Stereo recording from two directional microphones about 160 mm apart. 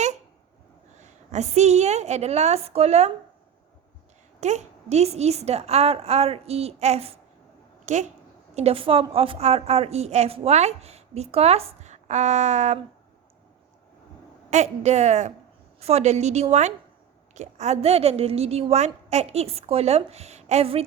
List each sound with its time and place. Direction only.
0.9 s a woman's voice: 45° right (ahead or behind)
4.4 s a woman's voice: 45° right (ahead or behind)
8.5 s a woman's voice: 40° right (ahead or behind)
14.5 s a woman's voice: 45° right (ahead or behind)